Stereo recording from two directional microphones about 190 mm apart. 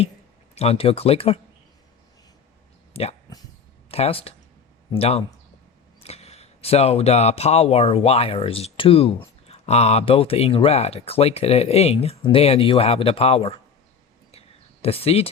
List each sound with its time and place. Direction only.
0.5 s speech: 35° left (ahead or behind)
2.9 s speech: 35° left (ahead or behind)
14.3 s a sound: 30° left (ahead or behind)